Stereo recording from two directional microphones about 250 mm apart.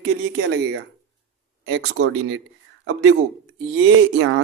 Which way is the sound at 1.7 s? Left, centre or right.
Right.